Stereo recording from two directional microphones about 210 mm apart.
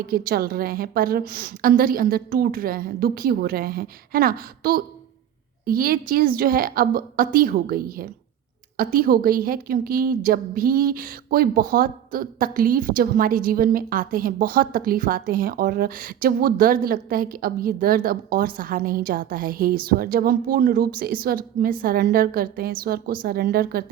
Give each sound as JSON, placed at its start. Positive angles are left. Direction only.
{"t": 0.0, "sound": "a woman's voice", "side_deg": -45}